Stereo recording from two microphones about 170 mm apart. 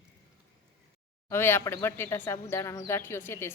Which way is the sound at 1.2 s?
15° left (ahead or behind).